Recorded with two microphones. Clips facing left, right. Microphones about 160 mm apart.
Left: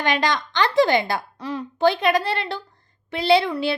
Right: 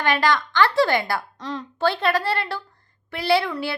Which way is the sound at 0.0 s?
20° left (ahead or behind).